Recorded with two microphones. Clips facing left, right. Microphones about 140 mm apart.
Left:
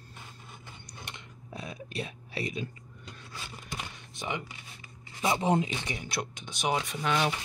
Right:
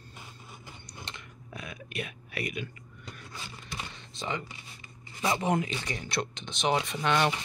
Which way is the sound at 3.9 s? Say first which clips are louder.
Right 2 dB; 15° left (ahead or behind).